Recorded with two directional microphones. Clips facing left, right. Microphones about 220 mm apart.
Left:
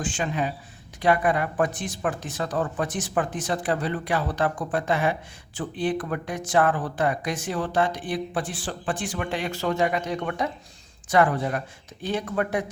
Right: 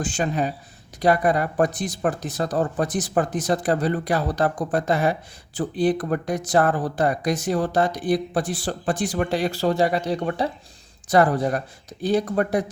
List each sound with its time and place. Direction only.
0.0 s speech: 40° right (ahead or behind)